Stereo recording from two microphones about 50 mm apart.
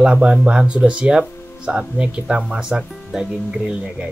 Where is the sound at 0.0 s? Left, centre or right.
Centre.